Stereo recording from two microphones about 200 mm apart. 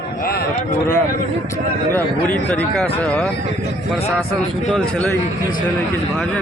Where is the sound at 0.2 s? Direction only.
50° left (ahead or behind).